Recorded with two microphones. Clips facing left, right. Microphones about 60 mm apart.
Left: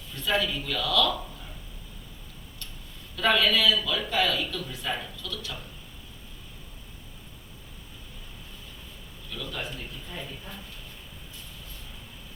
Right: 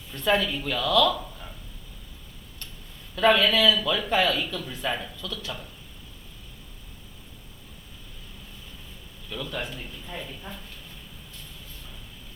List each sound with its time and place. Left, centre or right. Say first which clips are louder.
0.2 s speech: right 3 dB; right
3.2 s speech: right 3 dB; right
9.3 s speech: right 3 dB; right